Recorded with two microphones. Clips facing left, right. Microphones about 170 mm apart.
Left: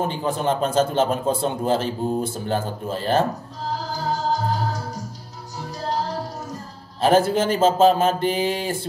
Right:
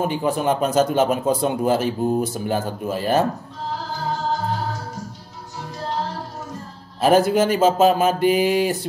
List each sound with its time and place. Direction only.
0.0 s speech: 10° right (ahead or behind)
3.9 s music: 40° left (ahead or behind)
7.2 s speech: 10° right (ahead or behind)